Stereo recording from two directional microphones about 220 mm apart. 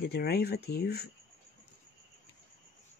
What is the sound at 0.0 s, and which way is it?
Speech, 45° left (ahead or behind).